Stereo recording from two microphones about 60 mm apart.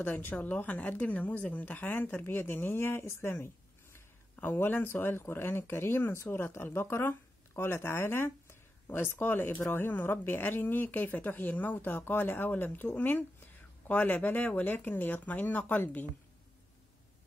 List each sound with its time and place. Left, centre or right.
0.0 s speech: left